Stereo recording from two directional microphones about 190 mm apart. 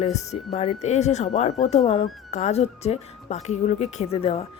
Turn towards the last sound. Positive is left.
turn(degrees=30)  # may be behind; listen again after turning